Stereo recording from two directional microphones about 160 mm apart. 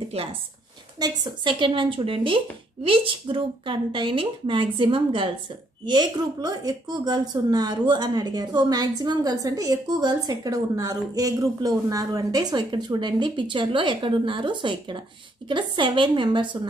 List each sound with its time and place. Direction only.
0.2 s speech: 40° right (ahead or behind)
0.9 s speech: 25° right (ahead or behind)